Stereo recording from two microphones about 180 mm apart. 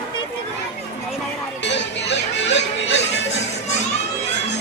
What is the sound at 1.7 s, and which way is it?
Music, 75° left (ahead or behind).